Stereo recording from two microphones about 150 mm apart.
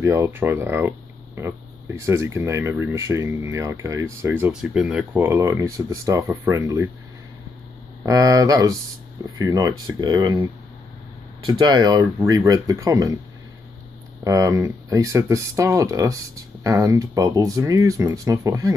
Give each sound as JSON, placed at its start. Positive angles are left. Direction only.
{"t": 0.0, "sound": "speech", "side_deg": -20}
{"t": 8.0, "sound": "speech", "side_deg": -25}
{"t": 11.4, "sound": "speech", "side_deg": -30}
{"t": 14.2, "sound": "speech", "side_deg": -20}